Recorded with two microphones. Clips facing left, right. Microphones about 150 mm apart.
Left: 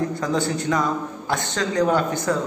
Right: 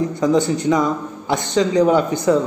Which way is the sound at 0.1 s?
20° right (ahead or behind).